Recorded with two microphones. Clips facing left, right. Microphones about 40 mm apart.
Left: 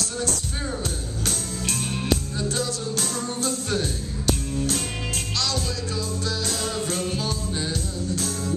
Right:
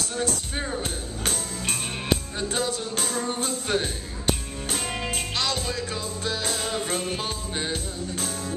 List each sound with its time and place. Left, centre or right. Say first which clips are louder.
1.2 s music: even; right
6.2 s music: right 2 dB; right